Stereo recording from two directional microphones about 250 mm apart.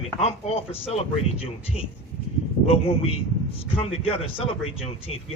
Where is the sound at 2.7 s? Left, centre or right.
Left.